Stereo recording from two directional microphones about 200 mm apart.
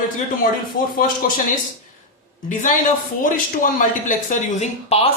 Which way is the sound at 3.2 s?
40° left (ahead or behind).